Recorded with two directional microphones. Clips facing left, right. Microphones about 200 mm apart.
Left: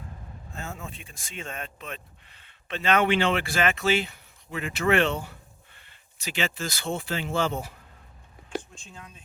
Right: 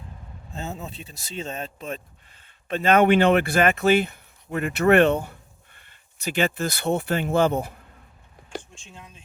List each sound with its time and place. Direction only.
0.6 s speech: 20° right (ahead or behind)
0.9 s speech: 35° right (ahead or behind)
1.5 s speech: 25° right (ahead or behind)
2.4 s speech: 50° right (ahead or behind)